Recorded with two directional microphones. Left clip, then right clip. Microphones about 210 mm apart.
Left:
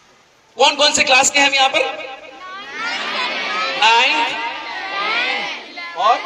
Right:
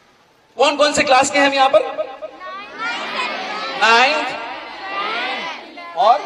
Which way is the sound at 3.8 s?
50° right (ahead or behind).